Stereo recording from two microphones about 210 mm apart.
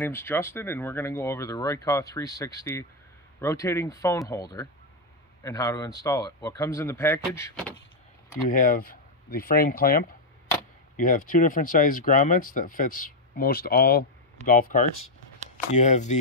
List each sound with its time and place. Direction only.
0.0 s speech: 10° left (ahead or behind)
8.5 s speech: 40° left (ahead or behind)